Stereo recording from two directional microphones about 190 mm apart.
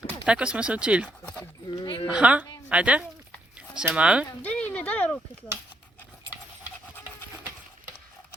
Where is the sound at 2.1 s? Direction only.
5° right (ahead or behind).